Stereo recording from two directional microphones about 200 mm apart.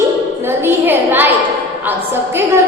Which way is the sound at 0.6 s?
10° right (ahead or behind).